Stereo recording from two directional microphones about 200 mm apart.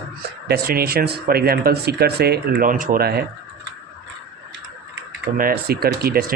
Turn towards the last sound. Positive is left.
turn(degrees=-50)  # may be behind; listen again after turning